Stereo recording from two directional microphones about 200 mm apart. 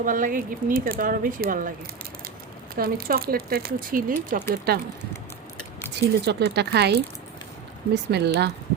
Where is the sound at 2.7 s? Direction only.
50° right (ahead or behind).